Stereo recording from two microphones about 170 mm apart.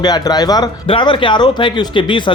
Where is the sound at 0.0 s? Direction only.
25° left (ahead or behind).